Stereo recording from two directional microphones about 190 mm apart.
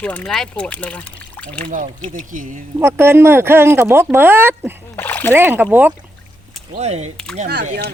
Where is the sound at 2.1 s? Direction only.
45° right (ahead or behind).